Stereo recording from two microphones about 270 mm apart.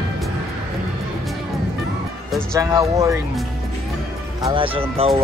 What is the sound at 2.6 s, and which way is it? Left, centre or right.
Speech, centre.